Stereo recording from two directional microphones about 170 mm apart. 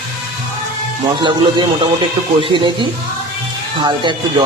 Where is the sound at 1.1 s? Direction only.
30° right (ahead or behind).